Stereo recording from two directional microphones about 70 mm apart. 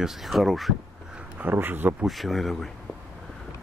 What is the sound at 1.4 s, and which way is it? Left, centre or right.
Speech, right.